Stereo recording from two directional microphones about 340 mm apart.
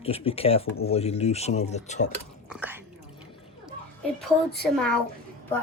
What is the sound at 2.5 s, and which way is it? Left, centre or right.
Whispering, centre.